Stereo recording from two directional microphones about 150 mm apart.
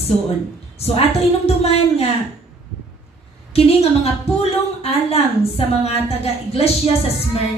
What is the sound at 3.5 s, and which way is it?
A woman's voice, 45° left (ahead or behind).